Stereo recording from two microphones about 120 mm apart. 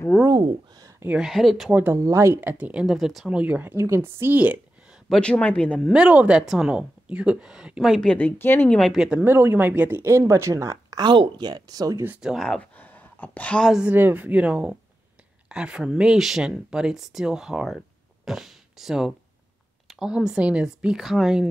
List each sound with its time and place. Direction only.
0.3 s a sound: 30° right (ahead or behind)
1.0 s speech: 5° right (ahead or behind)
1.7 s speech: 15° right (ahead or behind)
3.7 s speech: 25° right (ahead or behind)
5.1 s speech: 10° left (ahead or behind)
5.9 s speech: 10° right (ahead or behind)
8.1 s speech: 15° left (ahead or behind)
8.7 s speech: centre (ahead or behind)
9.2 s speech: 20° right (ahead or behind)
12.2 s speech: 5° right (ahead or behind)
12.4 s speech: 10° left (ahead or behind)
13.7 s speech: 15° right (ahead or behind)